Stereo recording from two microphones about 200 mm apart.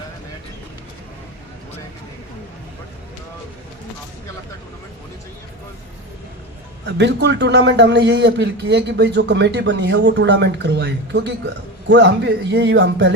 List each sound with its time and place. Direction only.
6.8 s a man's voice: 60° right (ahead or behind)